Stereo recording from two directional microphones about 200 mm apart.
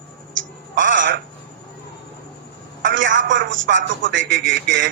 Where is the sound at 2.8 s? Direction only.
65° right (ahead or behind).